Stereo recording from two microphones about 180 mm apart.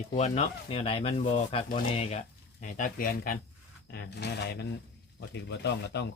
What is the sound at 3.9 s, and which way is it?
Speech, 65° left (ahead or behind).